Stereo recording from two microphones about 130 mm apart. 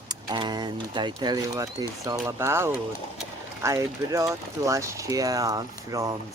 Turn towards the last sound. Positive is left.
turn(degrees=-25)  # may be behind; listen again after turning